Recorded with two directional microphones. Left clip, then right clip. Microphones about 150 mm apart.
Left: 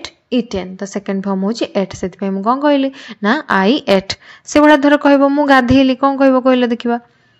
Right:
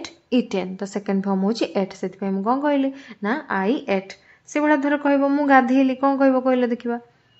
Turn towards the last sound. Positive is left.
turn(degrees=40)  # may be behind; listen again after turning